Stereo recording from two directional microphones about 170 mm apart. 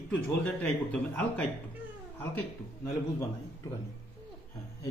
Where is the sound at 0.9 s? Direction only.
5° left (ahead or behind).